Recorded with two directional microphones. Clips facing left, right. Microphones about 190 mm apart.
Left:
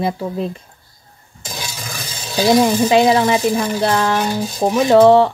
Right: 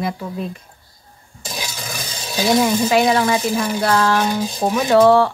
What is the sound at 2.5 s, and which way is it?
Speech, 20° left (ahead or behind).